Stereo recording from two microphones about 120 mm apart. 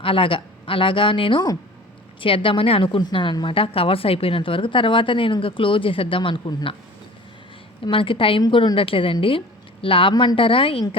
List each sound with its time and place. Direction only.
0.0 s a woman's voice: 45° left (ahead or behind)
7.9 s a woman's voice: 45° left (ahead or behind)